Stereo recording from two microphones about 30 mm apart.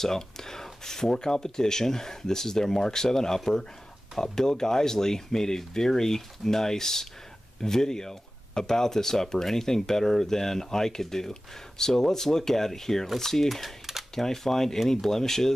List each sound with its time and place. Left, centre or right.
0.0 s speech: centre